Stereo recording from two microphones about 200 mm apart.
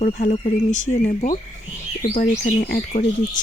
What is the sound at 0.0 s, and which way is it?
Speech, 40° left (ahead or behind).